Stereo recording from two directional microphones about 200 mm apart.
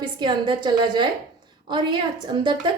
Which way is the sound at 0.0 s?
25° right (ahead or behind).